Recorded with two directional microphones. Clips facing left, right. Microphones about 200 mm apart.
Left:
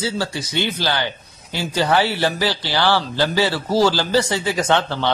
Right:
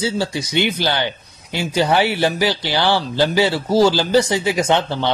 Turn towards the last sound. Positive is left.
turn(degrees=-15)  # may be behind; listen again after turning